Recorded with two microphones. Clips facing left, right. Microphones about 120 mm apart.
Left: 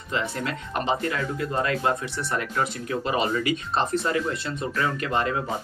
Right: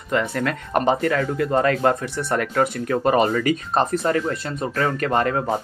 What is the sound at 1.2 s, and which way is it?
Speech, 70° right (ahead or behind).